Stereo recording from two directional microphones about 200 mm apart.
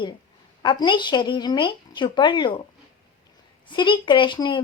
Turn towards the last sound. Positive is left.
turn(degrees=25)  # may be behind; listen again after turning